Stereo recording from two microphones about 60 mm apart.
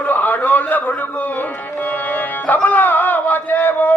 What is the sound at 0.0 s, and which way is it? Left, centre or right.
Music, left.